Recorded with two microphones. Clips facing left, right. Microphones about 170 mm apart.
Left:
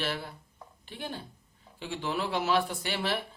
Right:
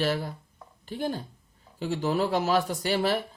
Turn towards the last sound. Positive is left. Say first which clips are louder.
# right 6 dB
turn(degrees=-40)  # may be behind; listen again after turning